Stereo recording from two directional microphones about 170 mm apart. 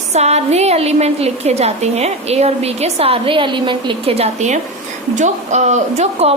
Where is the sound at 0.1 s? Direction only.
40° right (ahead or behind).